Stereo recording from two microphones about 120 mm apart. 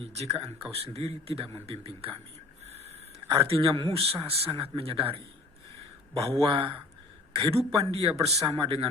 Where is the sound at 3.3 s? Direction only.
50° right (ahead or behind).